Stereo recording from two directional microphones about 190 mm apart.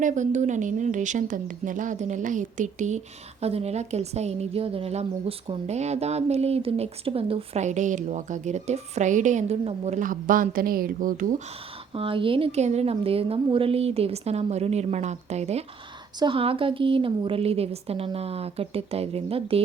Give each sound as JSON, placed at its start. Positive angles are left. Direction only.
{"t": 0.0, "sound": "speech", "side_deg": -40}
{"t": 11.9, "sound": "speech", "side_deg": -30}